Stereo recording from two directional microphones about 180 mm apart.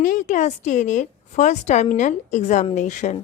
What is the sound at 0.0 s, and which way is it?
A woman's voice, 45° left (ahead or behind).